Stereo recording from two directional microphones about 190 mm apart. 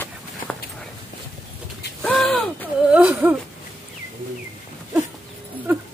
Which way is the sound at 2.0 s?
5° left (ahead or behind).